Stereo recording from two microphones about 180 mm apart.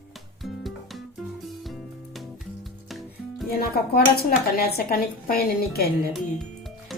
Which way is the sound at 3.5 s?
60° left (ahead or behind).